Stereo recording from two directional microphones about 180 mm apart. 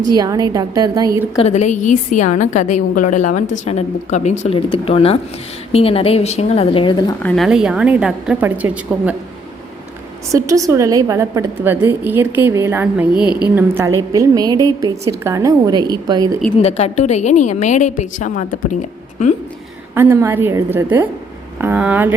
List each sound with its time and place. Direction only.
0.0 s a woman's voice: 20° right (ahead or behind)
1.4 s a woman's voice: 40° left (ahead or behind)
7.2 s a woman's voice: 5° left (ahead or behind)
10.3 s a woman's voice: 15° right (ahead or behind)
16.6 s a woman's voice: 35° left (ahead or behind)
19.9 s a woman's voice: 15° right (ahead or behind)